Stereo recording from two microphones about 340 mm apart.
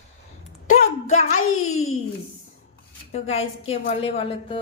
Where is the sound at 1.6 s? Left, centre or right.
Left.